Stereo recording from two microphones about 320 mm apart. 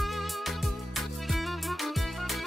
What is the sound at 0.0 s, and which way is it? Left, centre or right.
Music, centre.